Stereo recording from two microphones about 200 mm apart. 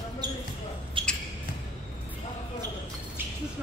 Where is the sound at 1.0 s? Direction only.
25° right (ahead or behind).